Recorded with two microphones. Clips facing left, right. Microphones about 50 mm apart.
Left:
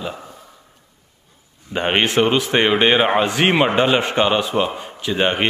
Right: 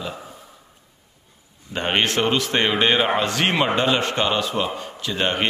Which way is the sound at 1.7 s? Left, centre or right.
Centre.